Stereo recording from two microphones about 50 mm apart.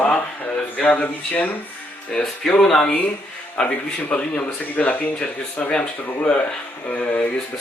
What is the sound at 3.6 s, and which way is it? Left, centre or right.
A man's voice, centre.